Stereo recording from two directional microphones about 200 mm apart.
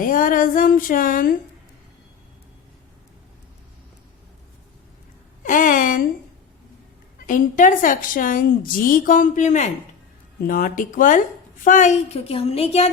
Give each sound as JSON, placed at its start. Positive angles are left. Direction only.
{"t": 0.0, "sound": "a sound", "side_deg": 45}
{"t": 5.4, "sound": "speech", "side_deg": 40}
{"t": 7.3, "sound": "a woman's voice", "side_deg": 40}